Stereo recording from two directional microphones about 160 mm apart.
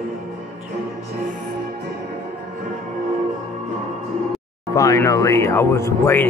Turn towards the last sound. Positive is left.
turn(degrees=15)  # may be behind; listen again after turning